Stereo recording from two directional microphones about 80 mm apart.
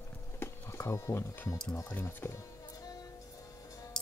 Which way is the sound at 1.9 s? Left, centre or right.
Left.